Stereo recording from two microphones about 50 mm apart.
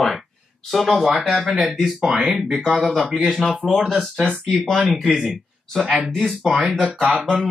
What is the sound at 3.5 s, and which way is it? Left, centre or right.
Speech, centre.